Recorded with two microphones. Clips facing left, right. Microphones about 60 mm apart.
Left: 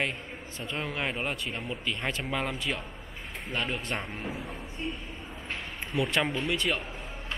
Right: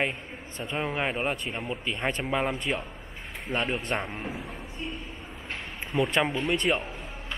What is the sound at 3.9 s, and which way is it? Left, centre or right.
Speech, centre.